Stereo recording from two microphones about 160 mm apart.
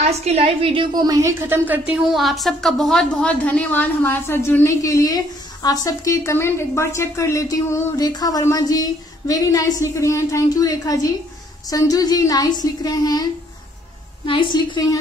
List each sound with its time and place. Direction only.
0.1 s a woman's voice: 40° right (ahead or behind); by 15.0 s 25° left (ahead or behind)